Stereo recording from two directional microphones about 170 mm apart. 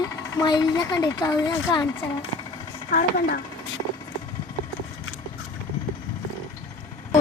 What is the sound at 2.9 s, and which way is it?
Speech, 60° left (ahead or behind).